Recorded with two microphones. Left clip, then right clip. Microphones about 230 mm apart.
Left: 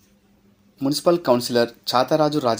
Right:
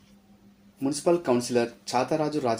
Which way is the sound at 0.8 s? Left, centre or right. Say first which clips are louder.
Left 5 dB; left.